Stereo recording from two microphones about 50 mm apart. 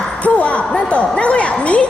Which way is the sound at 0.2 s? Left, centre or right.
Left.